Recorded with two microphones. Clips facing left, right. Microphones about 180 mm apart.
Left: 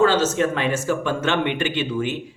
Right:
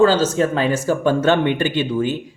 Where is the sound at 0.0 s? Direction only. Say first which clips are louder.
Right 3 dB; 35° right (ahead or behind).